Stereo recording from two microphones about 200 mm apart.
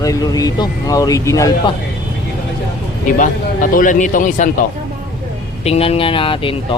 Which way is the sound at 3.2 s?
40° left (ahead or behind).